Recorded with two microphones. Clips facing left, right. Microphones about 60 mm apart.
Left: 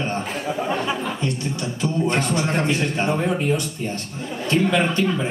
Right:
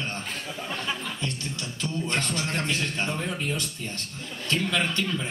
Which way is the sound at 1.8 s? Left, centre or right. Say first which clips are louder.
Left 7 dB; centre.